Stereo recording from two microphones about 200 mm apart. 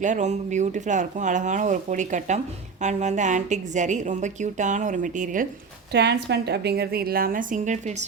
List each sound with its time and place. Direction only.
0.0 s a woman's voice: 35° right (ahead or behind)
5.9 s a woman's voice: 55° right (ahead or behind); by 8.0 s 35° right (ahead or behind)